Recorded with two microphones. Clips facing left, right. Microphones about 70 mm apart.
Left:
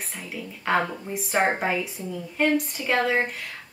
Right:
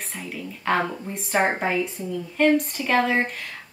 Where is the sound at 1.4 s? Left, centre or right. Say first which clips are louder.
Right 1 dB; centre.